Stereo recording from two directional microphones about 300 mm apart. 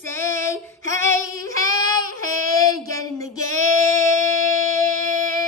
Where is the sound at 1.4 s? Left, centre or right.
Centre.